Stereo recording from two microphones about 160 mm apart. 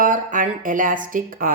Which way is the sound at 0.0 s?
55° right (ahead or behind).